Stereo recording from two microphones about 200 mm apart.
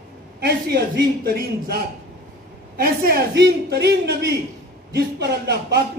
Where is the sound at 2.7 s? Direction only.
50° right (ahead or behind).